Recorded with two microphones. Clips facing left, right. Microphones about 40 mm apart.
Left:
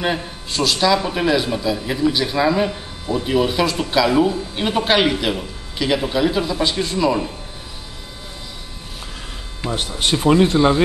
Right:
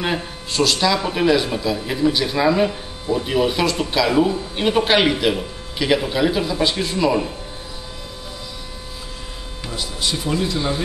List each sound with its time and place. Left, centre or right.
0.0 s speech: centre
9.7 s speech: left